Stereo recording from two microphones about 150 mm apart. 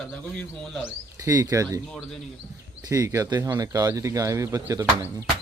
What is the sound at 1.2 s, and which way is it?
Speech, 20° right (ahead or behind).